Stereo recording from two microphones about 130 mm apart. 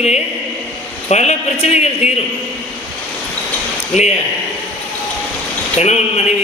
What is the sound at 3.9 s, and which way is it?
Speech, 60° left (ahead or behind).